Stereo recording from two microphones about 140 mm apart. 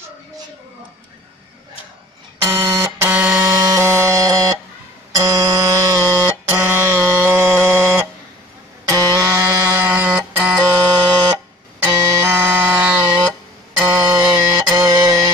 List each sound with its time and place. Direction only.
2.4 s music: 20° right (ahead or behind)
9.8 s alarm: 15° right (ahead or behind)
11.8 s music: 20° right (ahead or behind)
13.8 s music: 25° right (ahead or behind)
14.2 s music: 5° right (ahead or behind)
14.6 s music: 25° right (ahead or behind)